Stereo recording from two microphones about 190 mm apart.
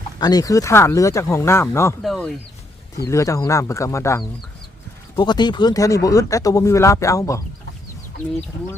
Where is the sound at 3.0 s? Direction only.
15° left (ahead or behind).